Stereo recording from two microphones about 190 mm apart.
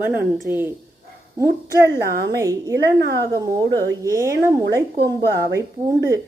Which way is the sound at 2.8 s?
60° right (ahead or behind).